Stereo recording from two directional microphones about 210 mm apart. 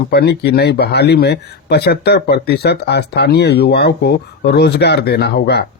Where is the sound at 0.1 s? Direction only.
50° left (ahead or behind).